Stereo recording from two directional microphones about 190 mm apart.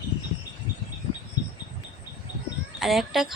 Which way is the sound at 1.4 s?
20° left (ahead or behind).